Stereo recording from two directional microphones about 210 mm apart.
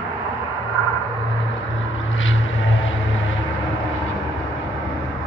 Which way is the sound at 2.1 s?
70° left (ahead or behind).